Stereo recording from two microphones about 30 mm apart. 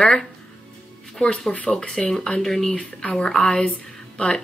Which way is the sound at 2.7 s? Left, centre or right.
Left.